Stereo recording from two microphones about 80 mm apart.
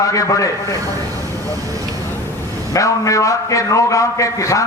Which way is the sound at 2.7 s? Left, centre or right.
Left.